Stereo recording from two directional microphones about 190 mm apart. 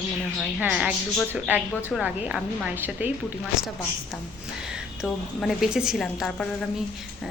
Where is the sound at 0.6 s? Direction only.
5° right (ahead or behind).